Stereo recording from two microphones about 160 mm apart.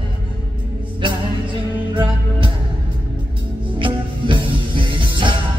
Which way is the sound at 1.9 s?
30° right (ahead or behind).